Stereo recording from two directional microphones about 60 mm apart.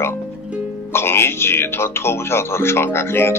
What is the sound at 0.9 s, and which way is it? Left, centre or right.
Speech, left.